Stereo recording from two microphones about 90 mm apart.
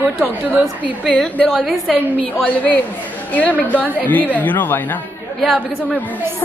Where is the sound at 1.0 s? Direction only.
5° left (ahead or behind).